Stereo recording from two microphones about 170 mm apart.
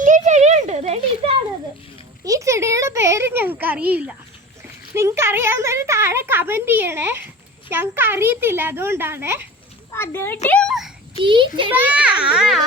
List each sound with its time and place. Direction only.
0.0 s a sound: 45° right (ahead or behind)
2.2 s a woman's voice: 20° right (ahead or behind)
9.9 s a child's voice: 15° left (ahead or behind)
11.2 s a child's voice: 30° right (ahead or behind)
11.7 s a child's voice: 10° right (ahead or behind)